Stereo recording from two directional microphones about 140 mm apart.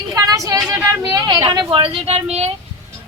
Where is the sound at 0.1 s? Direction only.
20° right (ahead or behind).